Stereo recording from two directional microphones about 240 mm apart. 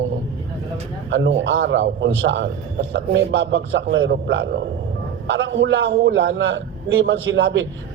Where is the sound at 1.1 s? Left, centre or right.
Right.